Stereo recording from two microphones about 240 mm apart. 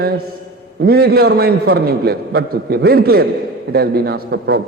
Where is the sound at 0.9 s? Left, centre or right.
Right.